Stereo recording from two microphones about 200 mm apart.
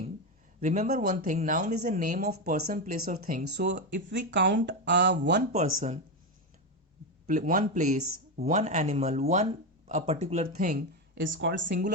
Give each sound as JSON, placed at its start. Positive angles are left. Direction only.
{"t": 0.6, "sound": "speech", "side_deg": -40}
{"t": 5.5, "sound": "speech", "side_deg": -40}
{"t": 7.3, "sound": "speech", "side_deg": -40}
{"t": 10.5, "sound": "speech", "side_deg": -45}
{"t": 11.2, "sound": "speech", "side_deg": -65}